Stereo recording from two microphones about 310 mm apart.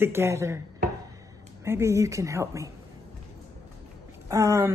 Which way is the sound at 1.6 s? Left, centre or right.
Centre.